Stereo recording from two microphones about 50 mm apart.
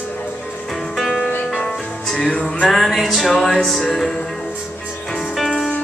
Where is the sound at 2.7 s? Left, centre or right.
Centre.